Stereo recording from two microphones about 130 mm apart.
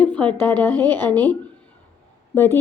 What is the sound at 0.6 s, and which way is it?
A woman's voice, 15° left (ahead or behind).